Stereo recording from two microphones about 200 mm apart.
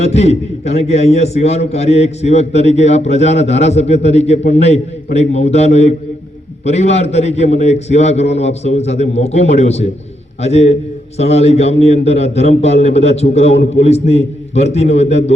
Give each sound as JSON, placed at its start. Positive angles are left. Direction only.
{"t": 0.0, "sound": "a man's voice", "side_deg": 35}